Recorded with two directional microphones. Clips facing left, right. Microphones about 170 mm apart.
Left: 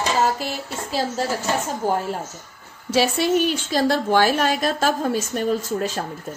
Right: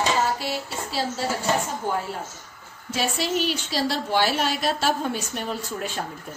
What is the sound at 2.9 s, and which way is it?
A woman's voice, 65° left (ahead or behind).